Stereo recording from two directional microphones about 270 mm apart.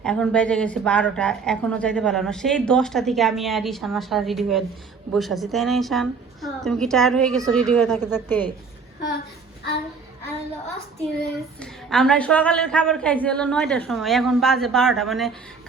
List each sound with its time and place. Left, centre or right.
0.0 s a woman's voice: centre
11.6 s a woman's voice: centre